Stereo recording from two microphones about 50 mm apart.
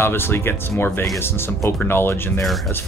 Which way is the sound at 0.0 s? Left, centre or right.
Left.